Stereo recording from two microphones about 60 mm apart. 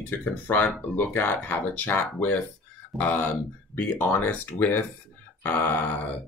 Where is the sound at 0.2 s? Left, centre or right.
Left.